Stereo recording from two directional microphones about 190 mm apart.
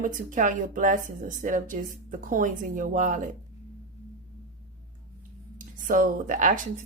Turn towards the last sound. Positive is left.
turn(degrees=-40)  # may be behind; listen again after turning